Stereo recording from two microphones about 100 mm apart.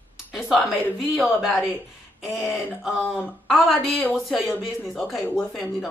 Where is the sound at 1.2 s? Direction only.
5° right (ahead or behind).